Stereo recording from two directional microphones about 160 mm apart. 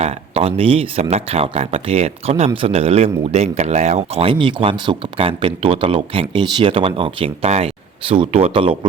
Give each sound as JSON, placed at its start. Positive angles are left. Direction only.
{"t": 0.0, "sound": "speech", "side_deg": -40}